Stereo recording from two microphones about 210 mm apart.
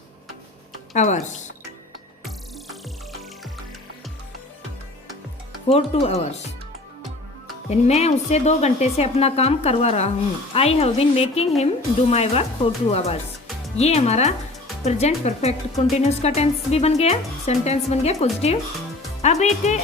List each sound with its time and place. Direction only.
0.9 s a woman's voice: 35° left (ahead or behind)
3.1 s music: centre (ahead or behind)
5.6 s speech: 30° left (ahead or behind)
7.7 s a woman's voice: 30° left (ahead or behind)